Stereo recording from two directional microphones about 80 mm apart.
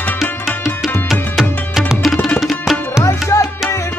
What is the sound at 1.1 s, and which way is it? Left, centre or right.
Music, centre.